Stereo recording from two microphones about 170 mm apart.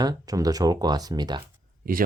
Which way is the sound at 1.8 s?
60° right (ahead or behind).